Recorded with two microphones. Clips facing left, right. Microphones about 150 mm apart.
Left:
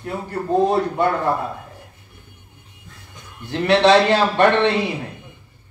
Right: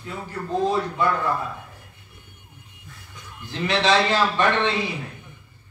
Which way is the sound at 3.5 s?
65° left (ahead or behind).